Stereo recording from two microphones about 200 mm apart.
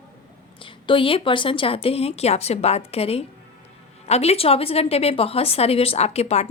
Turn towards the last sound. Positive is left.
turn(degrees=30)  # may be behind; listen again after turning